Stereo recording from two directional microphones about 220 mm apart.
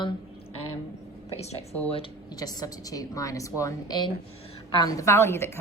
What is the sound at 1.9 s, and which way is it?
A woman's voice, 20° left (ahead or behind).